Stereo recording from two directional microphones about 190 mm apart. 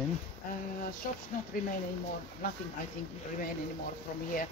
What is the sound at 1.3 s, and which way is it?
Speech, 45° left (ahead or behind).